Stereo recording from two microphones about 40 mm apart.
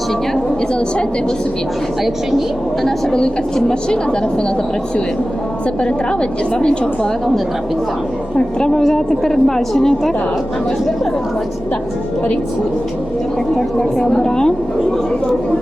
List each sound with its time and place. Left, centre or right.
2.8 s a woman's voice: centre
8.4 s a woman's voice: left
8.8 s a woman's voice: centre
13.6 s a woman's voice: centre